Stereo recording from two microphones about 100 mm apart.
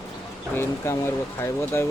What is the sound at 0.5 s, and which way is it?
Speech, 25° left (ahead or behind).